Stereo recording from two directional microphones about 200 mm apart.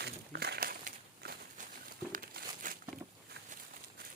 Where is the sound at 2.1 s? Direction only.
45° right (ahead or behind).